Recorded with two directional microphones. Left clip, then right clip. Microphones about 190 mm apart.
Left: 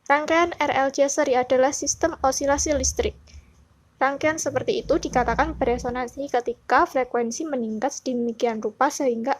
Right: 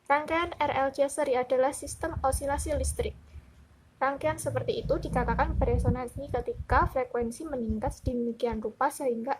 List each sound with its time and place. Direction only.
0.1 s a woman's voice: 35° left (ahead or behind)